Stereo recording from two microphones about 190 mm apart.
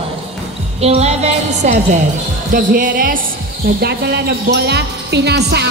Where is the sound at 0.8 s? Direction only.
35° right (ahead or behind).